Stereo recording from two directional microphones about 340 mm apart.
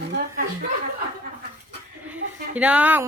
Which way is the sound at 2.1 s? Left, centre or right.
Centre.